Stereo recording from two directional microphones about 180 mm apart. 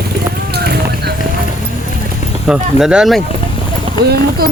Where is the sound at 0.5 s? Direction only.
65° right (ahead or behind).